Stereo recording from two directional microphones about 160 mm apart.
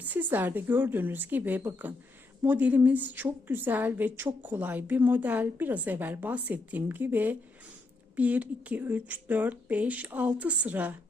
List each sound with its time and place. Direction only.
0.0 s a woman's voice: 10° right (ahead or behind)